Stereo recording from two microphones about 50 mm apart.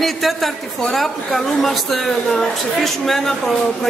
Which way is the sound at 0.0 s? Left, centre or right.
Centre.